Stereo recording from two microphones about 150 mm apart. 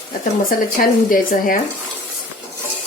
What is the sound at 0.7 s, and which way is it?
Speech, 65° left (ahead or behind).